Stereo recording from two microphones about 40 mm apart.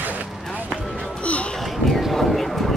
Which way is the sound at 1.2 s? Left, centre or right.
Left.